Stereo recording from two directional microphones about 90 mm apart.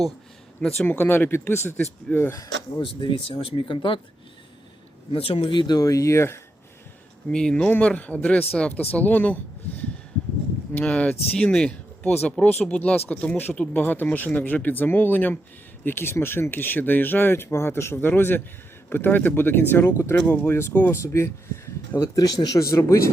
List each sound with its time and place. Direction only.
0.9 s speech: 20° left (ahead or behind)
2.3 s speech: 40° left (ahead or behind)
2.8 s speech: 80° left
5.1 s speech: 90° left; by 5.8 s 55° left (ahead or behind)
5.8 s speech: 40° left (ahead or behind)
7.3 s speech: 10° left (ahead or behind); by 22.6 s 50° left (ahead or behind)
22.7 s speech: 35° left (ahead or behind)